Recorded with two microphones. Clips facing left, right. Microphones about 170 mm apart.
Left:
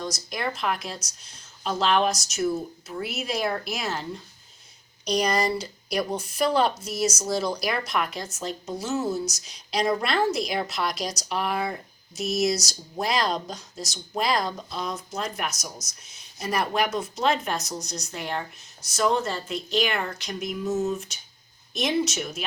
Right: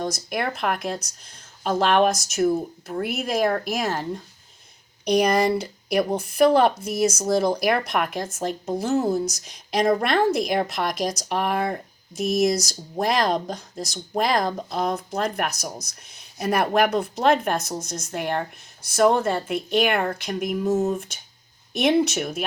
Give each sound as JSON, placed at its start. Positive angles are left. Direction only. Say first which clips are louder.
{"t": 0.0, "sound": "speech", "louder": "right 4 dB", "side_deg": -55}